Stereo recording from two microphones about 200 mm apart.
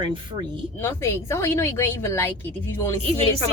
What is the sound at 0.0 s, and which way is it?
Speech, 25° right (ahead or behind).